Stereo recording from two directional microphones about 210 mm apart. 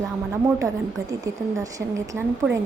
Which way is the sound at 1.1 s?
15° right (ahead or behind).